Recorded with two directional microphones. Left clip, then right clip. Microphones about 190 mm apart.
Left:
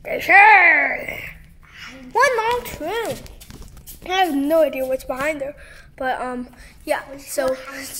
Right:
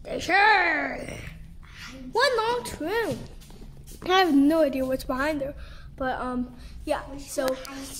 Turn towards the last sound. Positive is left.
turn(degrees=5)  # may be behind; listen again after turning